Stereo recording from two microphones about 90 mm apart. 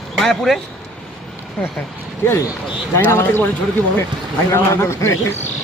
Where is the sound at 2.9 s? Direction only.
30° left (ahead or behind).